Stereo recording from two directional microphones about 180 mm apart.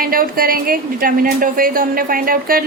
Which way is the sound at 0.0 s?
55° right (ahead or behind).